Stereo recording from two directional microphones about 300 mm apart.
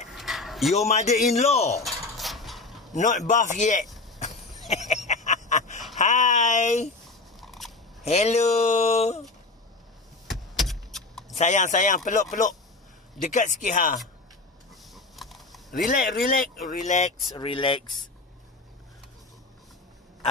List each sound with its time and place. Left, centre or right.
0.1 s a sound: centre
0.7 s speech: left
1.9 s dishes: centre
2.9 s speech: left
4.2 s cough: left
4.8 s a sound: left
5.9 s speech: left
7.3 s a sound: centre
8.0 s speech: left
10.3 s keys jangling: centre
11.3 s speech: left
15.0 s a sound: centre
15.7 s speech: left